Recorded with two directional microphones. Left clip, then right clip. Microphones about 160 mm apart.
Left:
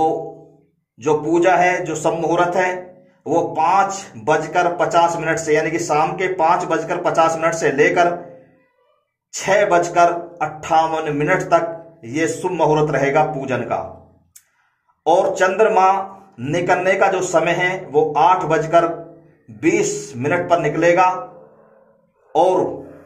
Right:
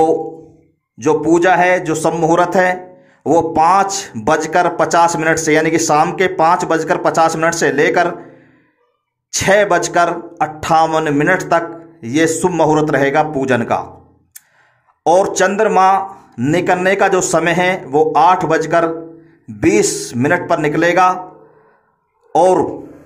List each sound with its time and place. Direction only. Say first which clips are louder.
0.9 s a man's voice: right 4 dB; 25° right (ahead or behind)
9.5 s a man's voice: right 3 dB; 30° right (ahead or behind)
15.0 s a man's voice: right 3 dB; 35° right (ahead or behind)
22.3 s speech: right 4 dB; 35° right (ahead or behind)